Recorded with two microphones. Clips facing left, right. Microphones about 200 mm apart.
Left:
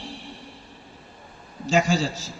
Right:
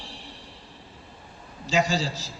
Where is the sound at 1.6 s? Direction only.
50° left (ahead or behind).